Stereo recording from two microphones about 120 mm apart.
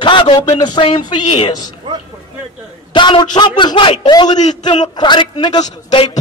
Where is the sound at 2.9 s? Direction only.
40° left (ahead or behind).